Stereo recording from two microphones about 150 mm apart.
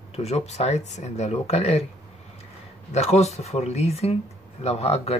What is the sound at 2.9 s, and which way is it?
Speech, 45° left (ahead or behind).